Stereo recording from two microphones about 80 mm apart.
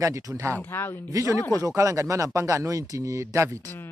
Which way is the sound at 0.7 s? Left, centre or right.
Left.